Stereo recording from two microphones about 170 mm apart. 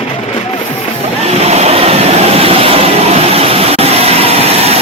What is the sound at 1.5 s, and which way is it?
Vehicle, 40° right (ahead or behind).